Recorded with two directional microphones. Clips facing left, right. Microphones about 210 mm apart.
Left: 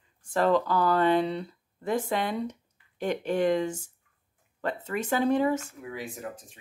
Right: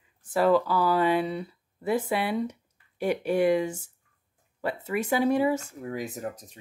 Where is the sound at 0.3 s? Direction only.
5° right (ahead or behind).